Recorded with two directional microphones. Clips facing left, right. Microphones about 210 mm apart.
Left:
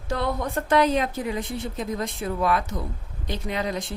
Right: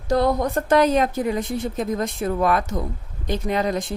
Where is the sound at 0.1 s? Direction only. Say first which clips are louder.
Right 7 dB; 40° right (ahead or behind).